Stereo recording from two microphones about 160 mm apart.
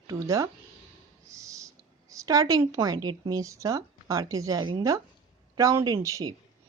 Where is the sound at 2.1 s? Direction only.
20° right (ahead or behind).